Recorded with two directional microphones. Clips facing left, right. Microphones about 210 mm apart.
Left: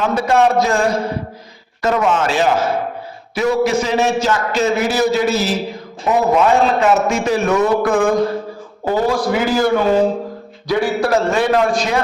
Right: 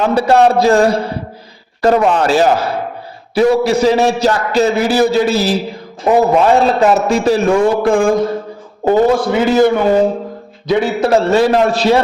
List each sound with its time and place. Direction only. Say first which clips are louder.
0.0 s a man's voice: right 4 dB; 35° right (ahead or behind)
10.7 s a man's voice: right 3 dB; 25° right (ahead or behind)